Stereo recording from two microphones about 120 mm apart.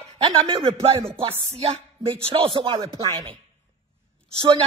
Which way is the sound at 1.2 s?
60° right (ahead or behind).